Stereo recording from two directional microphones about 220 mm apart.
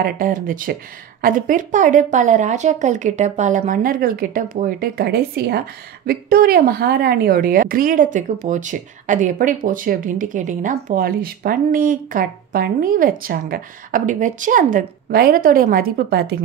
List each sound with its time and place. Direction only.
0.0 s a woman's voice: 40° right (ahead or behind)